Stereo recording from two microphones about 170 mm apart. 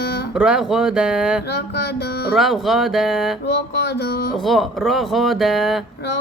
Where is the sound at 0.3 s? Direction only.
5° right (ahead or behind).